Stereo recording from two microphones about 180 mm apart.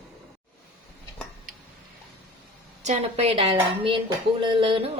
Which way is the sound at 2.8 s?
35° right (ahead or behind).